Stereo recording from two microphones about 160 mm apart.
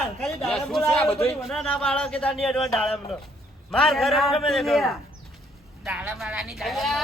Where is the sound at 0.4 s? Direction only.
Centre (ahead or behind).